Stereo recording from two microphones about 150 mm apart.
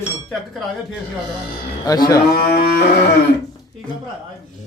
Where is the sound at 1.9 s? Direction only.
25° left (ahead or behind).